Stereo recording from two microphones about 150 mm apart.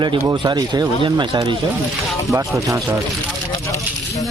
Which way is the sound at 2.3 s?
20° right (ahead or behind).